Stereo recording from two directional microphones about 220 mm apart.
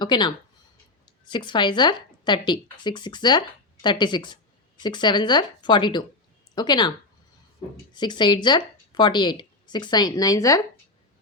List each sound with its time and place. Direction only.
0.0 s a woman's voice: 20° left (ahead or behind)
7.9 s a woman's voice: 20° left (ahead or behind)